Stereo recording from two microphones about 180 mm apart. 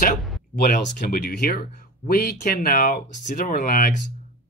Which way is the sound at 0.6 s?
50° left (ahead or behind).